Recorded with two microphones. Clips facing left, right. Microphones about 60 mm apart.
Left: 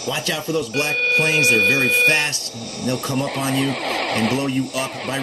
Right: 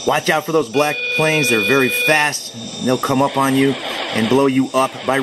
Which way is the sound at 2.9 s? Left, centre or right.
Right.